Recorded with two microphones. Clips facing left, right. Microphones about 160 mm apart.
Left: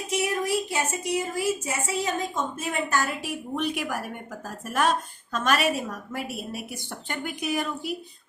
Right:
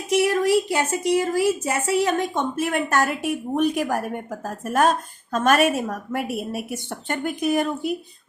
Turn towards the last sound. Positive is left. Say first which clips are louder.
# right 7 dB
turn(degrees=-50)  # may be behind; listen again after turning